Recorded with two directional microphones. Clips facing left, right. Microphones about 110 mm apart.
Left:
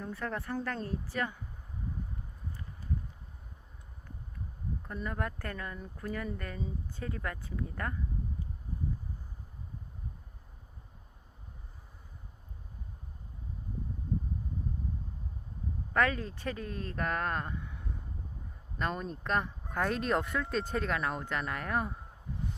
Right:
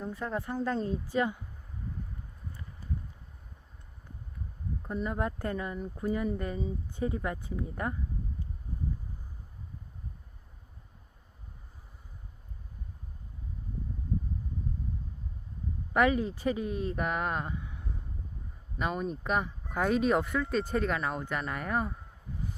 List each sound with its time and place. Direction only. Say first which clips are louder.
0.0 s speech: right 3 dB; 15° right (ahead or behind)
4.9 s speech: right 5 dB; 20° right (ahead or behind)
15.9 s speech: right 4 dB; 15° right (ahead or behind)